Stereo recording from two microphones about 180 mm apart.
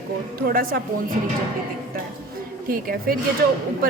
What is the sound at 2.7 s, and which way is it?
Speech, 50° right (ahead or behind).